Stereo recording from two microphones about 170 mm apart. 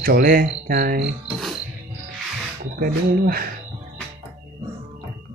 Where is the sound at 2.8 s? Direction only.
65° right (ahead or behind).